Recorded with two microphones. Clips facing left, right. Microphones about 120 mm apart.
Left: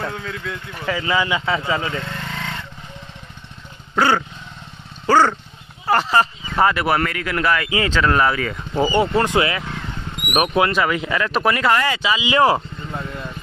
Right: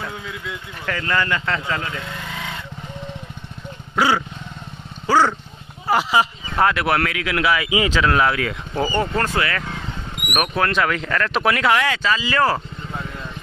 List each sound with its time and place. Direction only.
0.0 s speech: 10° right (ahead or behind)
0.7 s speech: 5° left (ahead or behind)
2.0 s vehicle: 10° right (ahead or behind)
3.9 s dog: 5° right (ahead or behind)
5.0 s speech: 5° right (ahead or behind)
8.0 s speech: centre (ahead or behind)
8.8 s speech: 10° left (ahead or behind)
10.7 s speech: 5° left (ahead or behind)
12.0 s speech: 15° left (ahead or behind)